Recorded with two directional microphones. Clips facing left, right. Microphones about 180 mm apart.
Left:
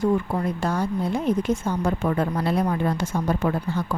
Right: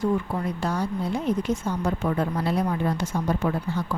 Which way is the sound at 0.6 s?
50° left (ahead or behind).